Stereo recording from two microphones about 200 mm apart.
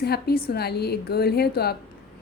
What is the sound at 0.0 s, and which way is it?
A woman's voice, 50° left (ahead or behind).